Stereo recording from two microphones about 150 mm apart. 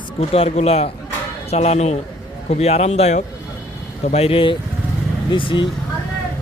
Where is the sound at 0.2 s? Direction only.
45° left (ahead or behind).